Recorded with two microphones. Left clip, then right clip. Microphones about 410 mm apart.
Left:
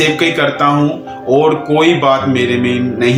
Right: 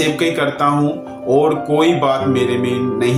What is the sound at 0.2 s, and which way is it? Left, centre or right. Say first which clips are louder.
Speech: left 4 dB; right.